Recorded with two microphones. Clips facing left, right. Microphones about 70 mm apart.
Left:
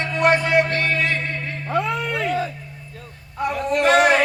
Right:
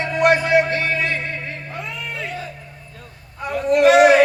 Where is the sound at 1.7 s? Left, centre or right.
Left.